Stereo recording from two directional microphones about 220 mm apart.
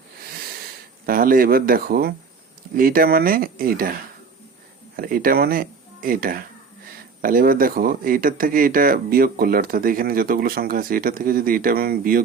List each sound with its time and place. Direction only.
1.0 s speech: 40° right (ahead or behind)
4.9 s speech: 40° right (ahead or behind)